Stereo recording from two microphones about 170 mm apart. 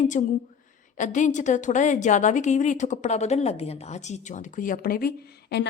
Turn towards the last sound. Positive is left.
turn(degrees=70)  # may be behind; listen again after turning